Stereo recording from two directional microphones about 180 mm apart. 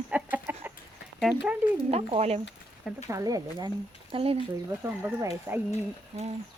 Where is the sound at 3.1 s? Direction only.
20° right (ahead or behind).